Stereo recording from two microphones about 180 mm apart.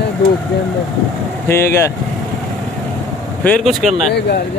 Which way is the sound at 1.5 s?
15° left (ahead or behind).